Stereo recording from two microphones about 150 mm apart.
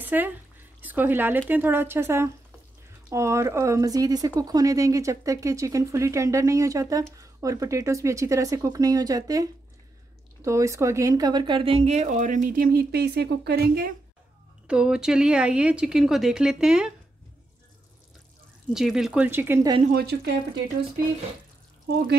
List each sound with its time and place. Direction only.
0.0 s a sound: 10° right (ahead or behind)
1.5 s speech: 15° right (ahead or behind); by 13.9 s 90° right
14.7 s speech: 5° right (ahead or behind)
18.7 s speech: 5° right (ahead or behind)
19.9 s speech: 90° right